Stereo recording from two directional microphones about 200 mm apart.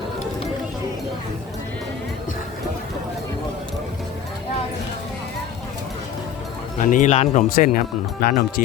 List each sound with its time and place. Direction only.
6.7 s speech: 40° left (ahead or behind)